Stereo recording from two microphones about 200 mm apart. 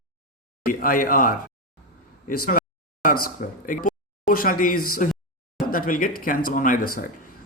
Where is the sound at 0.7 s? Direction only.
45° left (ahead or behind).